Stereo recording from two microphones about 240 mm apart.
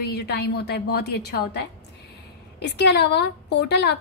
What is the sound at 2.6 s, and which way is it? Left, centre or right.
Speech, left.